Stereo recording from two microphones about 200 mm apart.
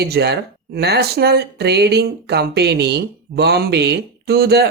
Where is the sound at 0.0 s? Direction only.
55° right (ahead or behind).